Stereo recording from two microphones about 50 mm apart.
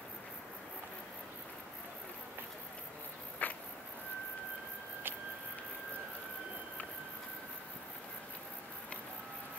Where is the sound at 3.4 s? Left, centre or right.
Left.